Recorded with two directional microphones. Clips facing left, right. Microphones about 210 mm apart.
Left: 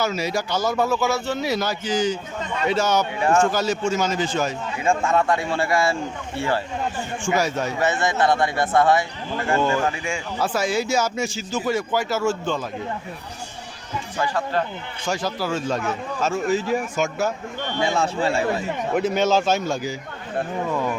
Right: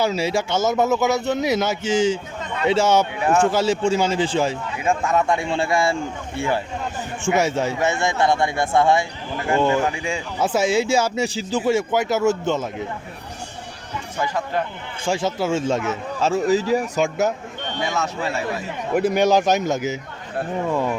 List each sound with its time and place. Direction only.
0.0 s speech: 30° right (ahead or behind)
3.2 s a man's voice: 10° right (ahead or behind)
3.5 s speech: 30° right (ahead or behind)
4.8 s speech: 5° right (ahead or behind)
5.3 s speech: 20° right (ahead or behind)
7.3 s speech: 25° right (ahead or behind)
14.2 s a man's voice: 15° right (ahead or behind)
15.0 s speech: 25° right (ahead or behind)
16.5 s speech: 35° right (ahead or behind)
17.8 s a man's voice: 30° left (ahead or behind)
18.9 s a man's voice: 10° right (ahead or behind)